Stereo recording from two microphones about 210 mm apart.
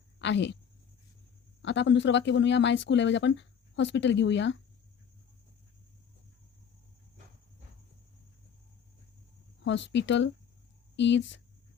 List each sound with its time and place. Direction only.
0.2 s speech: 55° left (ahead or behind)
1.6 s speech: 55° left (ahead or behind)
9.6 s speech: 60° left (ahead or behind)